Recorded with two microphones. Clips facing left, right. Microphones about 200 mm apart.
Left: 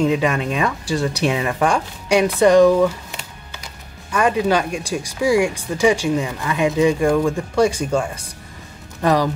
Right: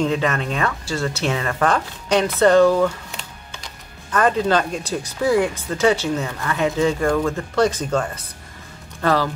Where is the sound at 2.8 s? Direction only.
5° left (ahead or behind).